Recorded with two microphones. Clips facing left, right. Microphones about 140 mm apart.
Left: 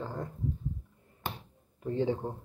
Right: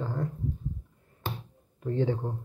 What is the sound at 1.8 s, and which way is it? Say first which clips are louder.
Speech: right 2 dB; 10° left (ahead or behind).